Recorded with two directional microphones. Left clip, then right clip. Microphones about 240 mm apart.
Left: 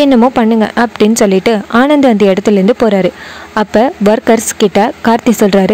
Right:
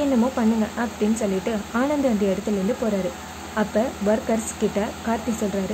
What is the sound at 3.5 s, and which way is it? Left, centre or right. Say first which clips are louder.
Speech: left 13 dB; left.